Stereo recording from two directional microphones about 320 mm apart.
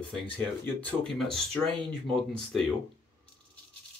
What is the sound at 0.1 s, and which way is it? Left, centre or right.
Speech, centre.